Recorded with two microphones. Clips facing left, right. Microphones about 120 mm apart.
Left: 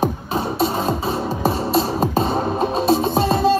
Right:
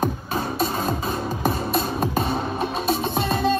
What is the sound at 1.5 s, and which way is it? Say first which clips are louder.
Music: left 4 dB; 30° left (ahead or behind).